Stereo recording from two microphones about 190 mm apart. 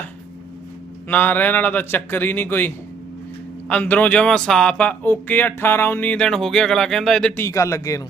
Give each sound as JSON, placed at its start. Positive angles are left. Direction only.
{"t": 1.0, "sound": "speech", "side_deg": 10}